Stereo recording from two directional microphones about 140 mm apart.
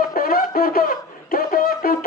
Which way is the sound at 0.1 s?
90° left.